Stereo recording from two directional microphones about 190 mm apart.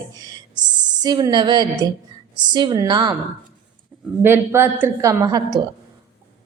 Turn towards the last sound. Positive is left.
turn(degrees=-20)  # may be behind; listen again after turning